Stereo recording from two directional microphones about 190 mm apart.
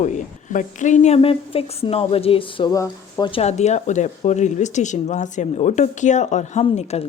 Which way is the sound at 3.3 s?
35° left (ahead or behind).